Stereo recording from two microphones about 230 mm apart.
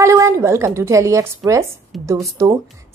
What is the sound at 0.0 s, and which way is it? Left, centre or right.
A woman's voice, centre.